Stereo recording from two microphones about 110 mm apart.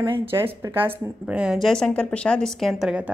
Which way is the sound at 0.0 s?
50° right (ahead or behind).